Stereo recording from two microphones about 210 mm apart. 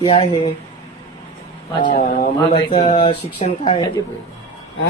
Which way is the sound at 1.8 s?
40° left (ahead or behind).